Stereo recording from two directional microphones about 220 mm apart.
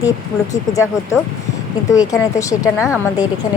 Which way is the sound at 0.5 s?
15° left (ahead or behind).